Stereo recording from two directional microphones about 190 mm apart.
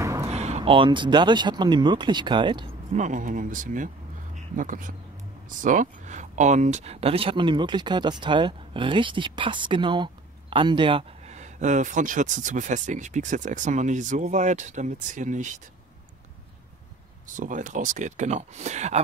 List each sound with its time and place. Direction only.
0.0 s a sound: 15° right (ahead or behind)
0.3 s speech: 35° right (ahead or behind)
3.0 s speech: 45° right (ahead or behind)
17.3 s speech: 40° right (ahead or behind)